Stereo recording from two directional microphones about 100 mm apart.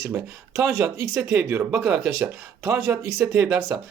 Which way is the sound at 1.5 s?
20° right (ahead or behind).